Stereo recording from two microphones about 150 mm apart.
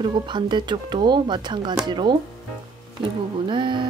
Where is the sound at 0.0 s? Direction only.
30° right (ahead or behind).